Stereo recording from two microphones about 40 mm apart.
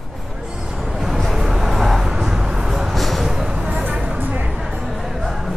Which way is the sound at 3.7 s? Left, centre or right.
Right.